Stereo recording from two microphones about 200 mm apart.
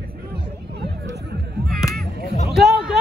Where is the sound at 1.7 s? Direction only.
Centre (ahead or behind).